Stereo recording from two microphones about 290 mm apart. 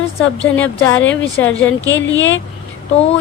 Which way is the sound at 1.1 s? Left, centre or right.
Centre.